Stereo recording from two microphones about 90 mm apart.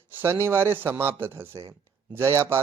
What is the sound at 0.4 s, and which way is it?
Speech, 25° right (ahead or behind).